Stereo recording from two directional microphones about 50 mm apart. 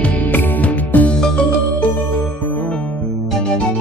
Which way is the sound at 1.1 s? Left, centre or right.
Centre.